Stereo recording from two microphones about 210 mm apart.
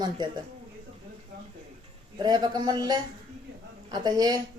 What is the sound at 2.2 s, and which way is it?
A woman's voice, 20° right (ahead or behind).